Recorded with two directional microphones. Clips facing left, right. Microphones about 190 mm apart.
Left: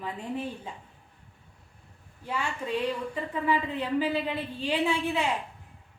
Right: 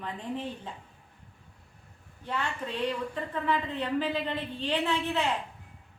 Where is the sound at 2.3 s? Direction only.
10° left (ahead or behind).